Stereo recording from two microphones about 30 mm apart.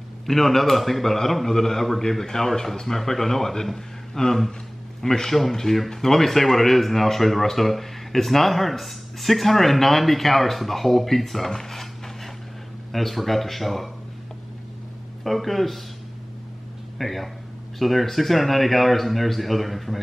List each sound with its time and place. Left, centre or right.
0.3 s a man's voice: centre
15.2 s speech: centre
17.0 s speech: centre